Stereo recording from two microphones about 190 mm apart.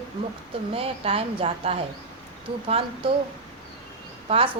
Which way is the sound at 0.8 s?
30° right (ahead or behind).